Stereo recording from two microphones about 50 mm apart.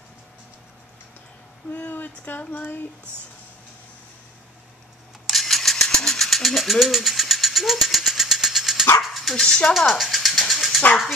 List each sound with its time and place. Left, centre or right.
1.7 s a sound: left
5.2 s mechanisms: centre
9.0 s dog: centre
9.8 s speech: centre
10.5 s dog: centre